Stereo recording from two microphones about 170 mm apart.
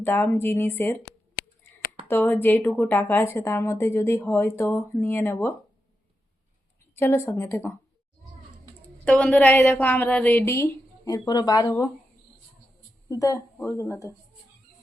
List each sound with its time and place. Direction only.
0.0 s a woman's voice: 10° left (ahead or behind)
6.9 s a woman's voice: 15° left (ahead or behind)
9.0 s a woman's voice: 5° left (ahead or behind); by 11.9 s 20° left (ahead or behind)
13.1 s a woman's voice: 20° left (ahead or behind)